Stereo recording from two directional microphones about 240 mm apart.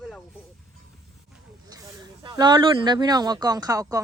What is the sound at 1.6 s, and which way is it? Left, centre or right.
Speech, centre.